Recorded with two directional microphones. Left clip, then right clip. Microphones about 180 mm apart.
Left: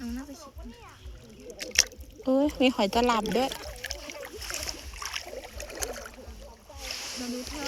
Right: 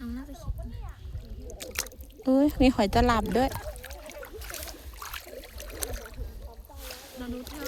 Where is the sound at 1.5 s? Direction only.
50° right (ahead or behind).